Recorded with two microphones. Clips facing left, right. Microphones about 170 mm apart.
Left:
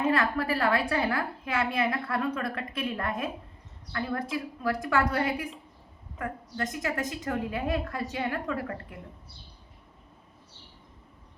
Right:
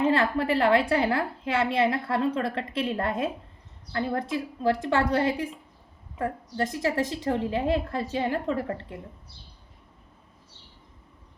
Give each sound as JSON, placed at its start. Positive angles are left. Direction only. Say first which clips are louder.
{"t": 0.1, "sound": "a woman's voice", "louder": "right 3 dB", "side_deg": -25}